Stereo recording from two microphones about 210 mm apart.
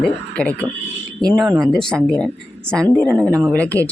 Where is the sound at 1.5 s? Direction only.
15° right (ahead or behind).